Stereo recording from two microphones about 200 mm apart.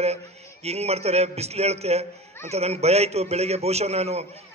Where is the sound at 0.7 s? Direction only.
30° right (ahead or behind).